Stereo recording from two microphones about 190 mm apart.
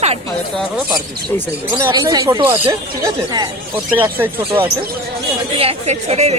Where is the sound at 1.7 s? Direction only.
15° right (ahead or behind).